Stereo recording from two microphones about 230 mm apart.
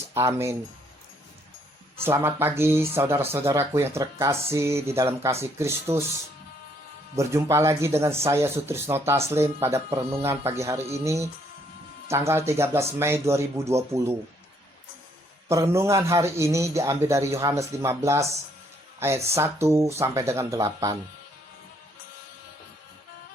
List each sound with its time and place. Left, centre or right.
0.1 s speech: centre
2.0 s speech: centre
7.2 s speech: centre
15.4 s speech: centre